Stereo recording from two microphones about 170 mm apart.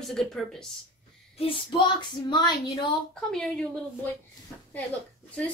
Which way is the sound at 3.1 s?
5° left (ahead or behind).